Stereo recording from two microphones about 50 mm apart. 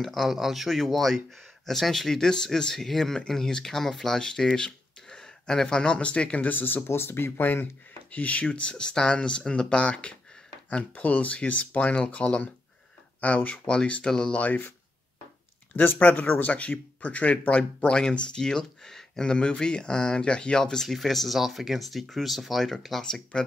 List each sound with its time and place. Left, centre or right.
0.0 s speech: centre; by 6.5 s left
6.5 s speech: left
6.9 s speech: left
8.1 s speech: left
14.0 s speech: centre
14.3 s speech: left
15.7 s speech: left; by 23.0 s centre
23.0 s speech: centre